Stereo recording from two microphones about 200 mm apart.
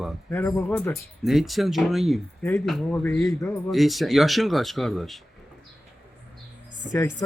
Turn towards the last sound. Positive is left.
turn(degrees=15)  # may be behind; listen again after turning